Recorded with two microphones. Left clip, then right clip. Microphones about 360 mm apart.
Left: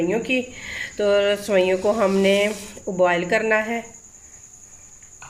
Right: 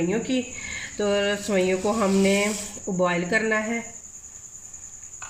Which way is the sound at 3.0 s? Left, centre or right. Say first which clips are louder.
Left 4 dB; left.